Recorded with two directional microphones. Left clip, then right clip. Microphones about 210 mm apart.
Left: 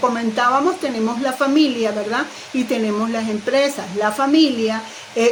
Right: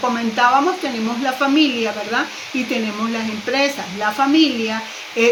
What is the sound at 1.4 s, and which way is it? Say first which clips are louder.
Speech: even; 55° left (ahead or behind).